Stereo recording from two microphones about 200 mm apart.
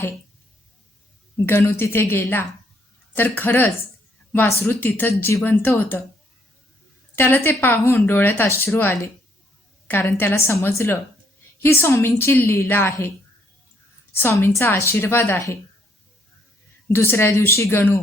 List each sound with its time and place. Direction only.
1.5 s speech: 10° left (ahead or behind)
7.2 s speech: 10° left (ahead or behind)
14.2 s speech: 10° left (ahead or behind)
16.9 s speech: 10° left (ahead or behind)